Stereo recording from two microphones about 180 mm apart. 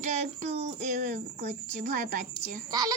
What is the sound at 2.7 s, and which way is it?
Speech, 20° right (ahead or behind).